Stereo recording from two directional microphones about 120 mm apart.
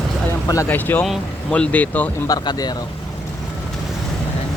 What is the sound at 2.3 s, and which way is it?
Speech, 35° left (ahead or behind).